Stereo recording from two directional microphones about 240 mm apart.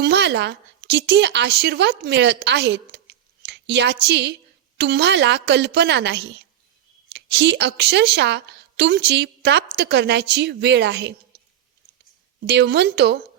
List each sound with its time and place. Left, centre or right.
0.0 s a woman's voice: right
12.5 s a woman's voice: right